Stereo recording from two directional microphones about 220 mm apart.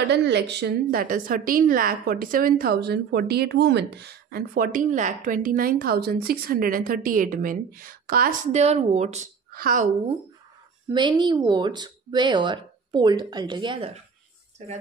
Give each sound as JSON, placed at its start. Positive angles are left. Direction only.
{"t": 0.1, "sound": "a woman's voice", "side_deg": -50}
{"t": 10.9, "sound": "speech", "side_deg": -20}